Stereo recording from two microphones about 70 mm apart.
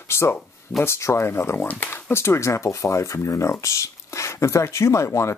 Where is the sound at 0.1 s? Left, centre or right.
Left.